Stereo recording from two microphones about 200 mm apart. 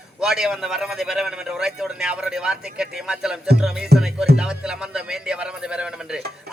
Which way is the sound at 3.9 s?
55° right (ahead or behind).